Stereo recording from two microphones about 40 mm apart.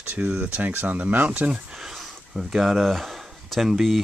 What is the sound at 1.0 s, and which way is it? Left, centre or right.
Speech, right.